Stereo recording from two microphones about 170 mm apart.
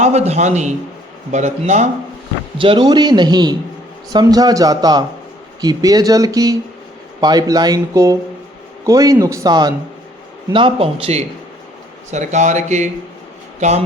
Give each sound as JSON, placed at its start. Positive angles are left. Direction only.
{"t": 0.0, "sound": "speech", "side_deg": -40}
{"t": 2.6, "sound": "speech", "side_deg": -30}